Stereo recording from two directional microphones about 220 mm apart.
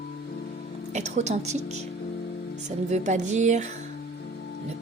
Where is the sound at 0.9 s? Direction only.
30° right (ahead or behind).